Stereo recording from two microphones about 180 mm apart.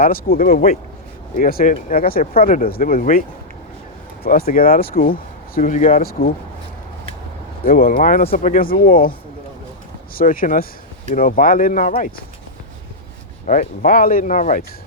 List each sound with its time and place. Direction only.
0.0 s speech: 50° left (ahead or behind)
7.6 s speech: 50° left (ahead or behind)
10.2 s speech: 50° left (ahead or behind)
13.5 s speech: 45° left (ahead or behind)